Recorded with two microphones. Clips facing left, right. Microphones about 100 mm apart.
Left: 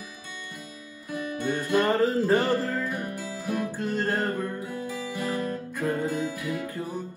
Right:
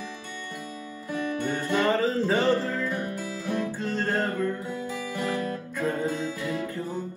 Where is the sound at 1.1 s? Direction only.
15° left (ahead or behind).